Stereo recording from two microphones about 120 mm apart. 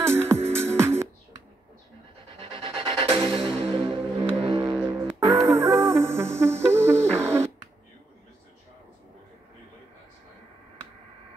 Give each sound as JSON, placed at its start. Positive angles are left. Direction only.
{"t": 0.0, "sound": "music", "side_deg": -20}
{"t": 2.3, "sound": "music", "side_deg": -50}
{"t": 5.4, "sound": "music", "side_deg": -25}